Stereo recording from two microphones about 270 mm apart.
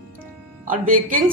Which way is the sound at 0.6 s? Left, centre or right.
Right.